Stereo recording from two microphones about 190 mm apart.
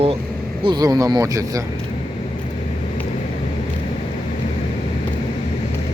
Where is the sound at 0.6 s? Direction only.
20° right (ahead or behind).